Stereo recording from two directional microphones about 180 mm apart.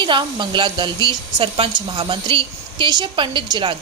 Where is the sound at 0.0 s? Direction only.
25° right (ahead or behind).